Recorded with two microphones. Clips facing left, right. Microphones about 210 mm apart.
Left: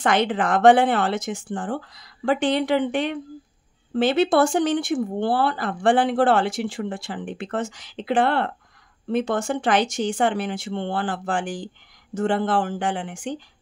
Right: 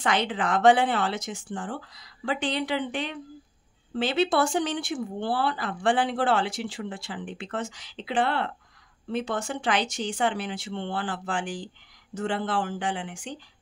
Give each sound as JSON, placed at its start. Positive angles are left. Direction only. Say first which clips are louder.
{"t": 0.0, "sound": "speech", "louder": "left 5 dB", "side_deg": 50}